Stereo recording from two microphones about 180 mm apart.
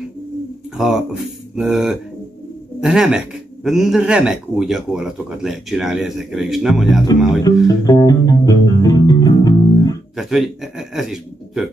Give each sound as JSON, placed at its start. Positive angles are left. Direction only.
{"t": 0.7, "sound": "a man's voice", "side_deg": 0}
{"t": 7.6, "sound": "music", "side_deg": 20}
{"t": 10.1, "sound": "speech", "side_deg": 0}